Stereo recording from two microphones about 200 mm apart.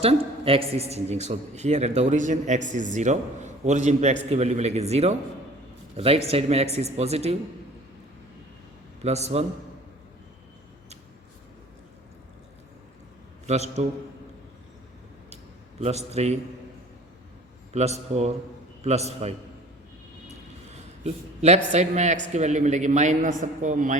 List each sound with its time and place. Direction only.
0.0 s a man's voice: 30° right (ahead or behind)
9.0 s a man's voice: 30° right (ahead or behind)
13.8 s a man's voice: 35° right (ahead or behind)
15.8 s a man's voice: 35° right (ahead or behind)
17.7 s a man's voice: 35° right (ahead or behind)
21.0 s a man's voice: 35° right (ahead or behind)